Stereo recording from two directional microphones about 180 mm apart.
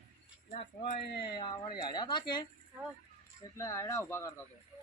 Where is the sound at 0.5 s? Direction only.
35° left (ahead or behind).